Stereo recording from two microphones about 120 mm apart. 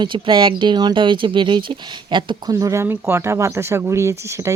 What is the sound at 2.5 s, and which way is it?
Speech, 25° right (ahead or behind).